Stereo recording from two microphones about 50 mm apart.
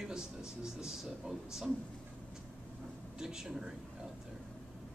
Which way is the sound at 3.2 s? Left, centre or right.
Centre.